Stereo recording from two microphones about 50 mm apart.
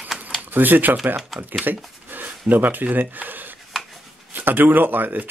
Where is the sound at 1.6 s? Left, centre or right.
Right.